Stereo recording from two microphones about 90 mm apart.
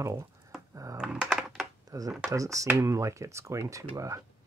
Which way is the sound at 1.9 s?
40° right (ahead or behind).